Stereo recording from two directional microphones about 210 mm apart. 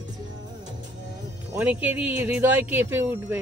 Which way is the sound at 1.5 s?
10° right (ahead or behind).